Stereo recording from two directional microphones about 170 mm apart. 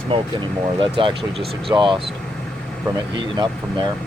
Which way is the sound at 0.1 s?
30° right (ahead or behind).